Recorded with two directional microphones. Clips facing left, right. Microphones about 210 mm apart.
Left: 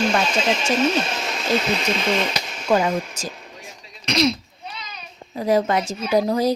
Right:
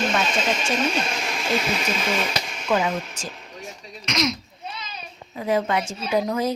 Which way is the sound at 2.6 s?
40° left (ahead or behind).